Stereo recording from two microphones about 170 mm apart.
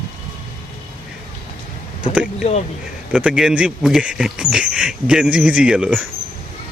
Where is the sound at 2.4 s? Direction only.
40° left (ahead or behind).